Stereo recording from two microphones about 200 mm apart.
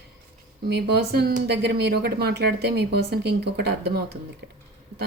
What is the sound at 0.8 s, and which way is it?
Speech, 55° right (ahead or behind).